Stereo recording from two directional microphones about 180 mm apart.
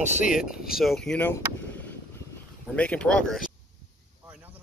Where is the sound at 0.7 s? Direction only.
Centre (ahead or behind).